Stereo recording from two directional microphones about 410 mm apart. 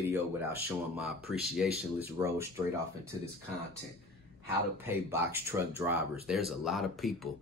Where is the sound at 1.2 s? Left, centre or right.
Centre.